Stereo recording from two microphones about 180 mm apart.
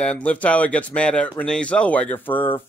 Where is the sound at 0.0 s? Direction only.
5° left (ahead or behind).